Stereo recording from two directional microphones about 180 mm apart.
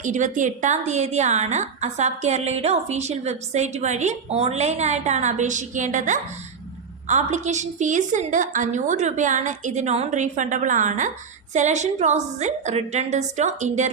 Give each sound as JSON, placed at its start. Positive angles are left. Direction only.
{"t": 0.0, "sound": "a woman's voice", "side_deg": -45}